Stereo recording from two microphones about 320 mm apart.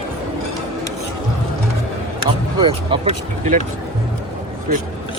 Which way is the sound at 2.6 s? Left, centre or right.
Centre.